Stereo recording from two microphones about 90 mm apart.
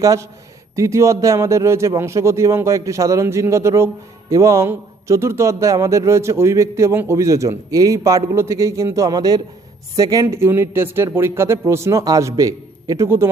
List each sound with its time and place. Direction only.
0.0 s a man's voice: 40° right (ahead or behind)
10.3 s a man's voice: 30° right (ahead or behind)
13.1 s speech: 25° right (ahead or behind)